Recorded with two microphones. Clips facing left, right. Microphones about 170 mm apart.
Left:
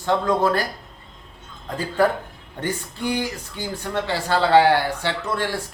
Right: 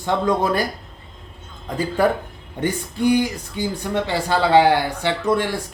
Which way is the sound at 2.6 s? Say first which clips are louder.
Right 6 dB; 15° right (ahead or behind).